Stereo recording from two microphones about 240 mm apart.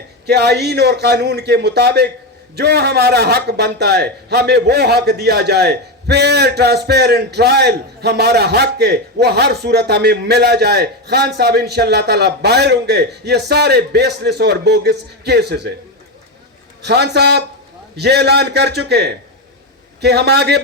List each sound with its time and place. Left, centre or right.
0.3 s a man's voice: right
16.8 s a man's voice: right